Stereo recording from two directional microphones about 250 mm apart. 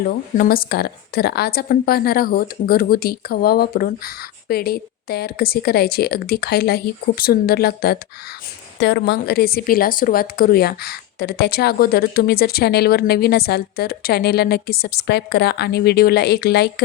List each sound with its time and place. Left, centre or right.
0.0 s a woman's voice: left